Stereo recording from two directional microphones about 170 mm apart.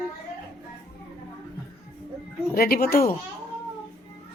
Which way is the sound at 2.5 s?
60° left (ahead or behind).